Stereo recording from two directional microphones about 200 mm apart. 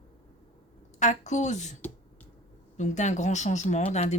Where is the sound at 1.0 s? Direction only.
35° left (ahead or behind).